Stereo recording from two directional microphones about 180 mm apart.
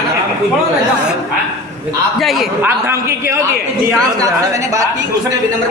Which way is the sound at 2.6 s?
15° right (ahead or behind).